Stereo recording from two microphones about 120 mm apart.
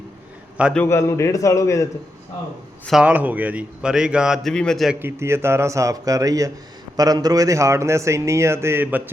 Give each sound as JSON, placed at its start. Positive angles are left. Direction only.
{"t": 0.9, "sound": "a man's voice", "side_deg": 25}
{"t": 2.9, "sound": "a man's voice", "side_deg": -10}
{"t": 4.5, "sound": "a man's voice", "side_deg": 5}
{"t": 4.9, "sound": "a man's voice", "side_deg": -20}